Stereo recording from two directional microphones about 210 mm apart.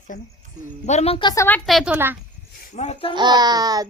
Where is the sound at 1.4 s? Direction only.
5° left (ahead or behind).